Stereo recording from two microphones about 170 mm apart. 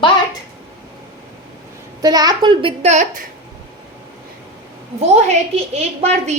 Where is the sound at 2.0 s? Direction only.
20° right (ahead or behind).